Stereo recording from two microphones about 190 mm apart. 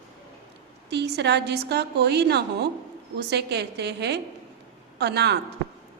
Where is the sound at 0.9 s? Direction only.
65° right (ahead or behind).